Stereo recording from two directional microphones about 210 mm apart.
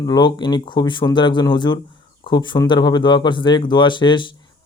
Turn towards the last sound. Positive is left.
turn(degrees=25)  # may be behind; listen again after turning